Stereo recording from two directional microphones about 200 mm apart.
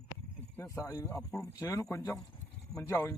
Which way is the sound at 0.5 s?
15° left (ahead or behind).